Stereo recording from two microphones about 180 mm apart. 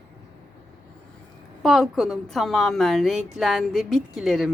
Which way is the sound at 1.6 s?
Centre (ahead or behind).